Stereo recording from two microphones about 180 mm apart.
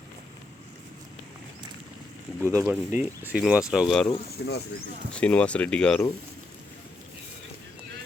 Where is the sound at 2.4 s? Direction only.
15° right (ahead or behind).